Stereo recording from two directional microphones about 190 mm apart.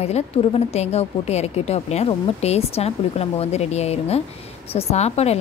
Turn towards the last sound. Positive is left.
turn(degrees=35)  # may be behind; listen again after turning